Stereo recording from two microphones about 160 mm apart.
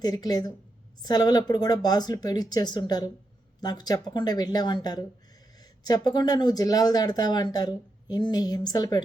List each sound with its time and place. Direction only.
0.0 s speech: 25° left (ahead or behind)